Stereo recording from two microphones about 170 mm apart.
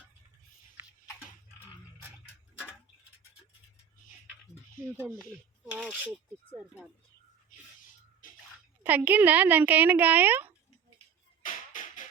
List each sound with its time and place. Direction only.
4.9 s speech: 5° left (ahead or behind)
5.7 s speech: 10° right (ahead or behind)
8.8 s speech: 10° right (ahead or behind)
11.4 s music: 50° left (ahead or behind)